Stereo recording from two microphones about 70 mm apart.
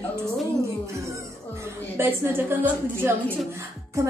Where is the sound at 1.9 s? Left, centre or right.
Right.